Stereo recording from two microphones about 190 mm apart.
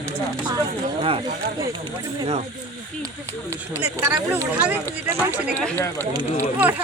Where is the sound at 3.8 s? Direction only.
10° right (ahead or behind).